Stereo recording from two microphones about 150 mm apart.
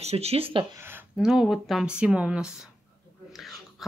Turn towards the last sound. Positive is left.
turn(degrees=0)  # may be behind; listen again after turning